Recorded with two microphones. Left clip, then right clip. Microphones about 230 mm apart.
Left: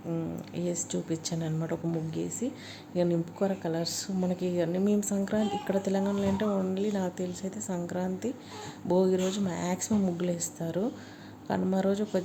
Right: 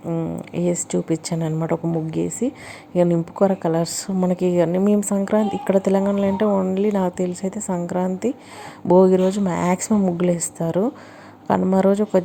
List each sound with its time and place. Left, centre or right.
0.6 s speech: right
2.9 s speech: right